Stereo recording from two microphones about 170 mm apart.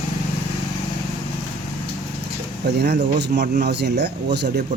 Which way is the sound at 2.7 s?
75° right (ahead or behind).